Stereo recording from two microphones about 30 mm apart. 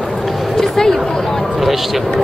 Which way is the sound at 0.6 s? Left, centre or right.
Centre.